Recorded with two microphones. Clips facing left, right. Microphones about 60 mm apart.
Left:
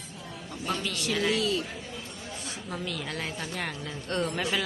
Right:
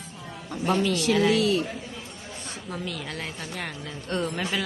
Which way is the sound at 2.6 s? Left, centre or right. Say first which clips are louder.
Right 1 dB; centre.